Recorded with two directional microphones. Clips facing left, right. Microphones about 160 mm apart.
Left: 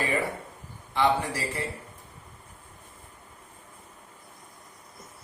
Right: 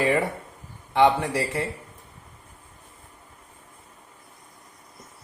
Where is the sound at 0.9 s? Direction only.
75° right (ahead or behind).